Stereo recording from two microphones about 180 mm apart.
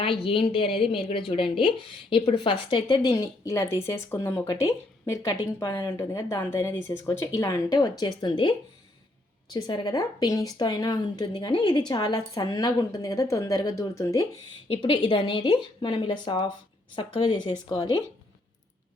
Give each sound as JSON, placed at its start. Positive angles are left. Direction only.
{"t": 0.0, "sound": "speech", "side_deg": 30}
{"t": 14.7, "sound": "speech", "side_deg": 30}